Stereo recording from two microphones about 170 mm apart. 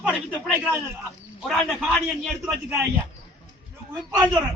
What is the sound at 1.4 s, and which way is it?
A man's voice, centre (ahead or behind).